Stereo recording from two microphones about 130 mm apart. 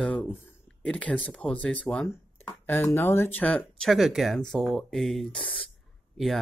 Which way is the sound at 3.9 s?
Centre (ahead or behind).